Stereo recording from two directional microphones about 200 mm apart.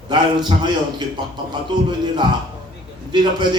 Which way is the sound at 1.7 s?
20° right (ahead or behind).